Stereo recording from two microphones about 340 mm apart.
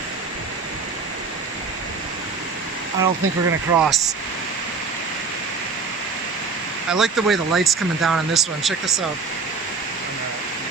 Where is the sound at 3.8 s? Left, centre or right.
Centre.